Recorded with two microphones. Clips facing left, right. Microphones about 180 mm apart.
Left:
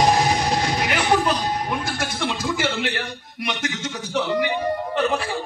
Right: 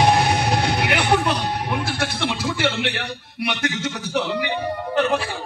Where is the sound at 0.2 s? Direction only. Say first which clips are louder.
Right 1 dB; 65° right (ahead or behind).